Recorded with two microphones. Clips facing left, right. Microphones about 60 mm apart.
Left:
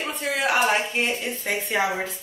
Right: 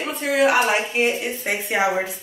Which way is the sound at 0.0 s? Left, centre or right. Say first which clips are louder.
Right 6 dB; centre.